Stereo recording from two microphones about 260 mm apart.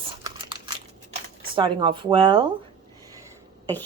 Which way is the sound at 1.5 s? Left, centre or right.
Centre.